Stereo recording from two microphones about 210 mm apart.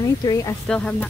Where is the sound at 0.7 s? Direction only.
5° left (ahead or behind).